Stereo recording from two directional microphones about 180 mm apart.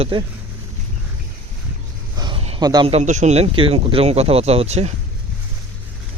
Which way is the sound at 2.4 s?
35° right (ahead or behind).